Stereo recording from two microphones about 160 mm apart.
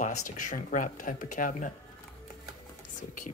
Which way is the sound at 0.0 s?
55° left (ahead or behind).